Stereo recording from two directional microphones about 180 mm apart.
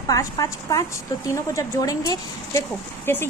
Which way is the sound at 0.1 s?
20° left (ahead or behind).